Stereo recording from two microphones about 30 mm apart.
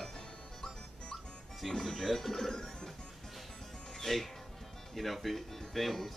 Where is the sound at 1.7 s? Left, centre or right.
Centre.